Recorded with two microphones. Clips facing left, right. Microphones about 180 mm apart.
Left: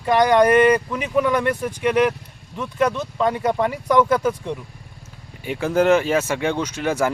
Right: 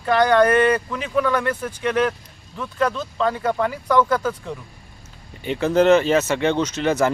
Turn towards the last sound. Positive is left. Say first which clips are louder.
# right 2 dB
turn(degrees=10)  # may be behind; listen again after turning